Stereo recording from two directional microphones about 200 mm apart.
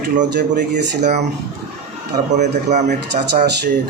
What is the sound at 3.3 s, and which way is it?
Speech, 55° right (ahead or behind).